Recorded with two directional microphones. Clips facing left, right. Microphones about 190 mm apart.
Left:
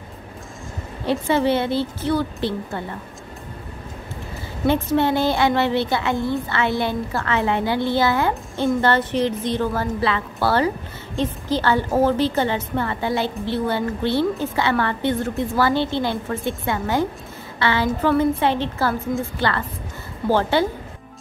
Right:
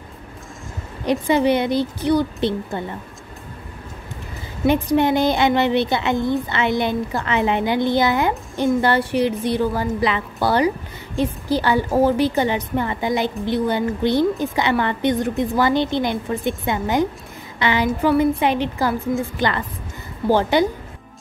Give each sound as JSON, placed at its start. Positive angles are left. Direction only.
{"t": 1.0, "sound": "a woman's voice", "side_deg": -15}
{"t": 4.6, "sound": "a woman's voice", "side_deg": -15}